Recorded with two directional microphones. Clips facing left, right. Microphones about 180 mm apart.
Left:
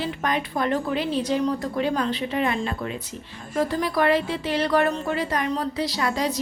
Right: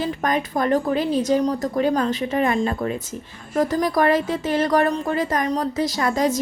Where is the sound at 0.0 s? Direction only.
45° right (ahead or behind).